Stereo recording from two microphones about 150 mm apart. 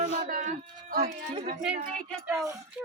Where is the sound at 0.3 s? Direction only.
55° right (ahead or behind).